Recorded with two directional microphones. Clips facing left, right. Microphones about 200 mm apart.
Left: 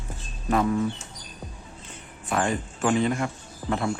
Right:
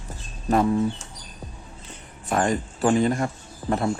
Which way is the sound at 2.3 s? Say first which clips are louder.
Right 3 dB; 40° right (ahead or behind).